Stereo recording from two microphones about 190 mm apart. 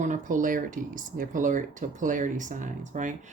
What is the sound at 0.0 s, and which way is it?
Speech, 40° right (ahead or behind).